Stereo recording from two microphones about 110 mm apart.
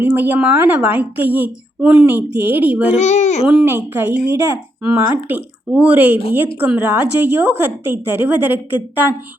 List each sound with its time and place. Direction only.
0.0 s a woman's voice: 15° right (ahead or behind)
3.0 s a child's voice: 90° left
3.4 s a woman's voice: 5° right (ahead or behind)
3.7 s a woman's voice: 20° right (ahead or behind)